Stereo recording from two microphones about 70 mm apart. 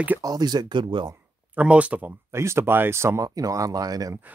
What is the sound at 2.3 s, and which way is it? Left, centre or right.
Speech, right.